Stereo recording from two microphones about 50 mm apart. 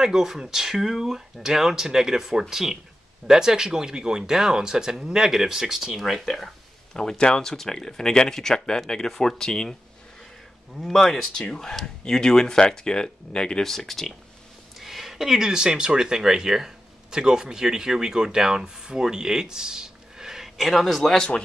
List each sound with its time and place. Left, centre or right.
0.0 s speech: centre
10.8 s speech: centre
13.7 s speech: centre
21.1 s speech: centre